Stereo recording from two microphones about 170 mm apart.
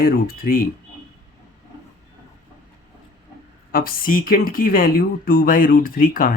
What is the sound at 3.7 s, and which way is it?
Speech, 60° left (ahead or behind).